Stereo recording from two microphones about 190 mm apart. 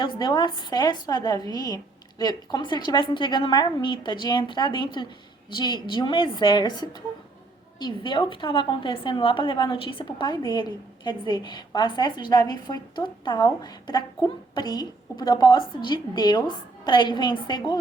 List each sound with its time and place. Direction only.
0.0 s a woman's voice: 20° left (ahead or behind)